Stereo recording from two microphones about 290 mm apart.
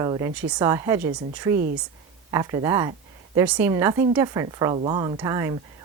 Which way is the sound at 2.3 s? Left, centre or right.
Centre.